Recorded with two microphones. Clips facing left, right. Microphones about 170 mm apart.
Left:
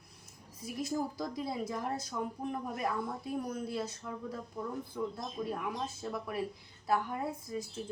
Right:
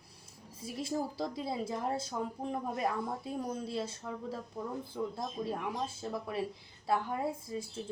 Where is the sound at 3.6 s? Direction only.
25° right (ahead or behind).